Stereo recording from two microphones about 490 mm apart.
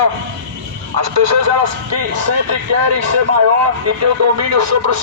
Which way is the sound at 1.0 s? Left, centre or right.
Right.